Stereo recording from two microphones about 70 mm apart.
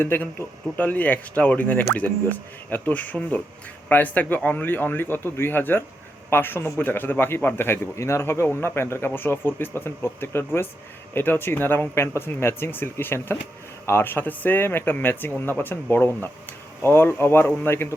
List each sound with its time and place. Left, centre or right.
0.0 s a man's voice: left